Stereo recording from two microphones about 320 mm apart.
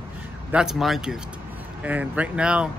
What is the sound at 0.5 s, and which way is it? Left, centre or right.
Speech, centre.